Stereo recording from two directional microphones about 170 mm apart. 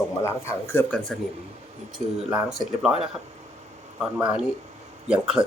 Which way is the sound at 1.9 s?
Centre (ahead or behind).